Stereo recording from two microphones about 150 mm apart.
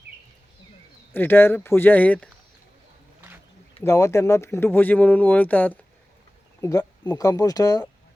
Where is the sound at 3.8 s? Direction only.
20° left (ahead or behind).